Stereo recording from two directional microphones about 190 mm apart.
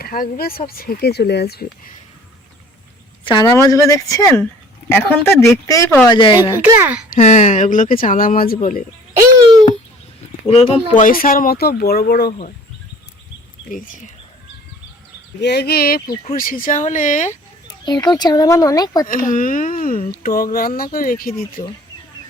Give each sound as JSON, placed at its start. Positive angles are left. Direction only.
{"t": 0.0, "sound": "speech", "side_deg": 50}
{"t": 3.2, "sound": "speech", "side_deg": 20}
{"t": 6.3, "sound": "speech", "side_deg": -10}
{"t": 7.1, "sound": "speech", "side_deg": 40}
{"t": 10.4, "sound": "speech", "side_deg": 35}
{"t": 11.0, "sound": "speech", "side_deg": 50}
{"t": 13.7, "sound": "speech", "side_deg": 45}
{"t": 15.4, "sound": "speech", "side_deg": 60}
{"t": 17.8, "sound": "speech", "side_deg": 20}
{"t": 19.0, "sound": "speech", "side_deg": 45}
{"t": 21.3, "sound": "speech", "side_deg": 30}